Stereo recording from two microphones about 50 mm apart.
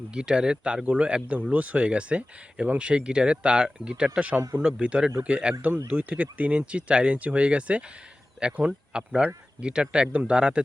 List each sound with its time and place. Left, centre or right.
0.1 s speech: centre